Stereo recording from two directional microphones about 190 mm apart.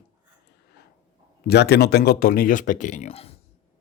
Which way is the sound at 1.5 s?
60° left (ahead or behind).